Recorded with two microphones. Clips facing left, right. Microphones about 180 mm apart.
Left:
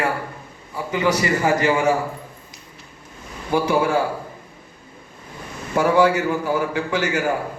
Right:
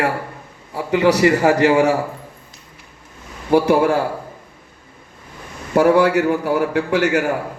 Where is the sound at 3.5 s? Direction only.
65° right (ahead or behind).